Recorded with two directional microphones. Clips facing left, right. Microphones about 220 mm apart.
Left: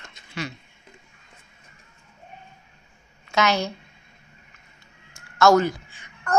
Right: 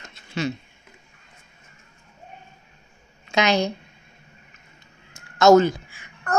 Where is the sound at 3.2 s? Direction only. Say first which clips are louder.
Right 2 dB; 15° right (ahead or behind).